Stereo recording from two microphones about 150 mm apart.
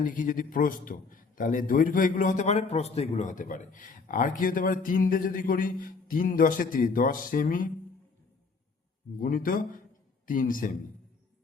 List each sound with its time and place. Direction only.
0.0 s a man's voice: 65° left (ahead or behind)
9.1 s a man's voice: 70° left (ahead or behind)